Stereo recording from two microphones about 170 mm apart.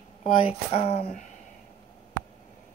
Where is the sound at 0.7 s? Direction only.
35° left (ahead or behind).